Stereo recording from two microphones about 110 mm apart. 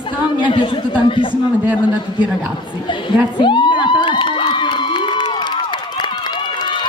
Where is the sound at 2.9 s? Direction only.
45° left (ahead or behind).